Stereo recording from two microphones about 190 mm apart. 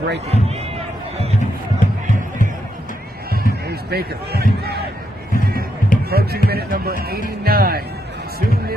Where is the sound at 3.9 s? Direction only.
55° right (ahead or behind).